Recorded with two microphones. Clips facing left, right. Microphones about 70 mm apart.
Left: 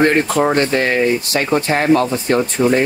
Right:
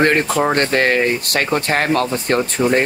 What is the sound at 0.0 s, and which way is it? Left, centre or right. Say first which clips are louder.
Speech: left 1 dB; right.